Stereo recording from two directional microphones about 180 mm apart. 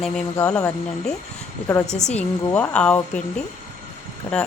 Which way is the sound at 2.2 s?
10° left (ahead or behind).